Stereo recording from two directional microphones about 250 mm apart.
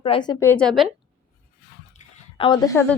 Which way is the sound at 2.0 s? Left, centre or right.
Left.